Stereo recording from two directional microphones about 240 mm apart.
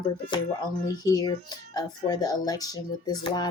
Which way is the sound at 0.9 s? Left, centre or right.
Centre.